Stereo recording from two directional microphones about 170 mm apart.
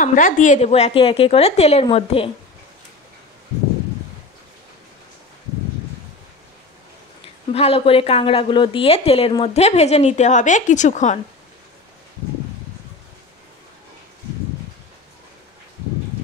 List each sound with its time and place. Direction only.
0.0 s a woman's voice: 50° left (ahead or behind); by 2.3 s 35° left (ahead or behind)
7.5 s a woman's voice: 35° left (ahead or behind)